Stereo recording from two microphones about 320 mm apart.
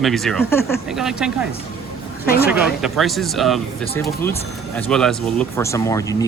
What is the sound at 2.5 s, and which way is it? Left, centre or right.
Speech, centre.